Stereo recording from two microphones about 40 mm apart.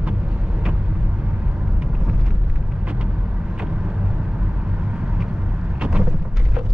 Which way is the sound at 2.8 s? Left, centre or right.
Right.